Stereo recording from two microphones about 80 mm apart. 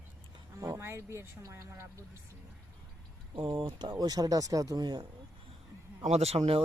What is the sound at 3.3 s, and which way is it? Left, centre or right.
Speech, right.